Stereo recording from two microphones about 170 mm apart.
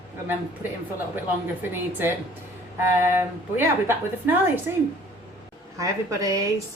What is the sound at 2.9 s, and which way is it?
A woman's voice, 15° right (ahead or behind).